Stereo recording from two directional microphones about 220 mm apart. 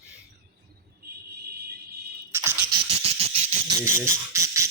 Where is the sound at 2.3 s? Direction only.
10° right (ahead or behind).